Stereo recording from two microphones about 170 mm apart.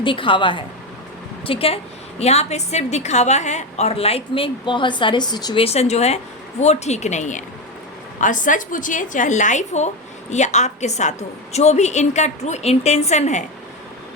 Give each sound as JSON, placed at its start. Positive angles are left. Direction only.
{"t": 0.0, "sound": "a woman's voice", "side_deg": 30}
{"t": 5.6, "sound": "a woman's voice", "side_deg": 35}